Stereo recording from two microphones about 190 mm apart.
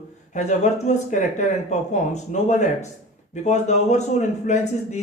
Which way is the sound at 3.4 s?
40° left (ahead or behind).